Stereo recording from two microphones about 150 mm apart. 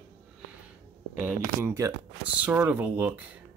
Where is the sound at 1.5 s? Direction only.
20° right (ahead or behind).